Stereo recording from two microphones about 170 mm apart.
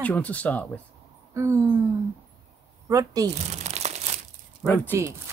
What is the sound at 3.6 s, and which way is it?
Crumpling, 40° right (ahead or behind).